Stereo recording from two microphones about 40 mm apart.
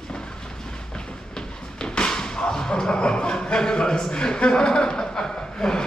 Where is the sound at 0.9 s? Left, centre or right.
Centre.